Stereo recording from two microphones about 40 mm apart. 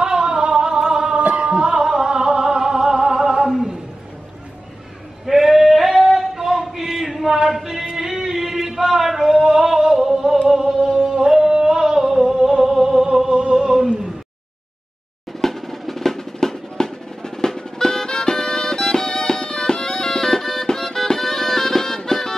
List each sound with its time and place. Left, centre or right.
0.0 s music: right
5.2 s a sound: centre
8.0 s music: centre
8.9 s a sound: centre
9.9 s music: centre
11.1 s a sound: centre
12.6 s music: centre
13.3 s music: right
15.4 s drum roll: centre